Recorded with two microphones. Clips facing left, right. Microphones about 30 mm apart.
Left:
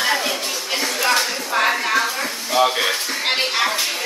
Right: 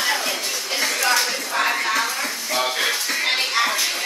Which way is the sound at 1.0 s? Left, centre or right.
Left.